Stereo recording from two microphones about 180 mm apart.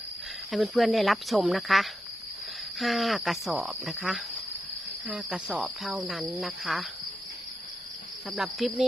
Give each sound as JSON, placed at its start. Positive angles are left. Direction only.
{"t": 0.5, "sound": "cricket", "side_deg": 0}
{"t": 8.3, "sound": "cricket", "side_deg": 0}